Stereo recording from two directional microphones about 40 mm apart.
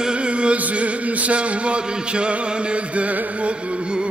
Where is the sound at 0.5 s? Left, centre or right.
Right.